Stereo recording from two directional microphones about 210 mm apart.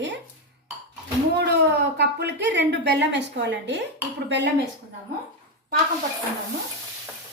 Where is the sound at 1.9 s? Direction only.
55° right (ahead or behind).